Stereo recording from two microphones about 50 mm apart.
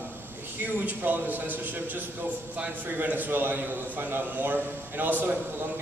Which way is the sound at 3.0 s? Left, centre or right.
Right.